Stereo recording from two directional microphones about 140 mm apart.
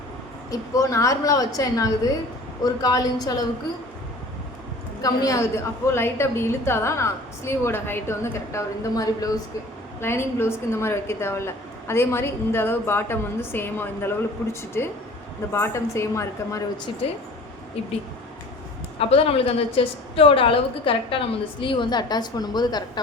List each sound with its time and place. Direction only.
0.5 s a woman's voice: 25° left (ahead or behind)
5.0 s a woman's voice: 25° left (ahead or behind)
15.5 s a woman's voice: 20° left (ahead or behind)
18.9 s a woman's voice: 45° left (ahead or behind)